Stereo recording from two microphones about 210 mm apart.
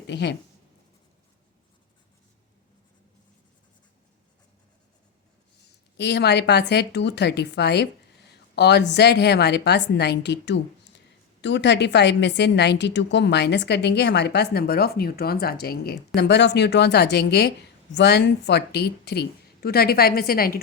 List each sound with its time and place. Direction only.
0.1 s speech: 55° left (ahead or behind)
6.0 s a woman's voice: 50° left (ahead or behind)